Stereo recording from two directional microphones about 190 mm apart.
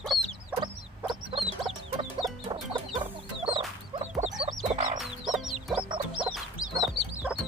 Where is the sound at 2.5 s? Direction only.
25° right (ahead or behind); by 5.0 s 40° right (ahead or behind).